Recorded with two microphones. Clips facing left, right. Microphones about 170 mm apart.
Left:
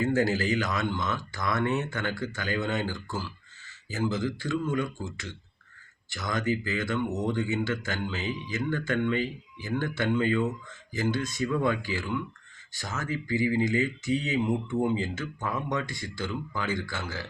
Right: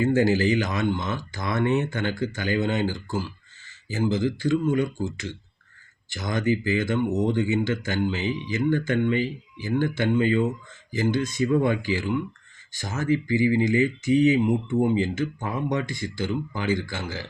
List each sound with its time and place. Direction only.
0.2 s speech: 20° right (ahead or behind)
6.1 s speech: 20° right (ahead or behind)